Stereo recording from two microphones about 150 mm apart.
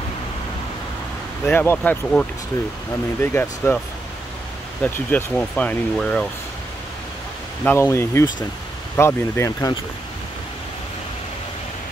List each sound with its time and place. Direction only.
1.4 s speech: 15° left (ahead or behind)
4.8 s speech: 10° left (ahead or behind)
7.6 s speech: 15° left (ahead or behind)